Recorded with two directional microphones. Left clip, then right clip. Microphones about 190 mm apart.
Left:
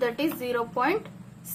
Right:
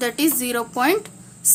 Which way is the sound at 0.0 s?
50° right (ahead or behind).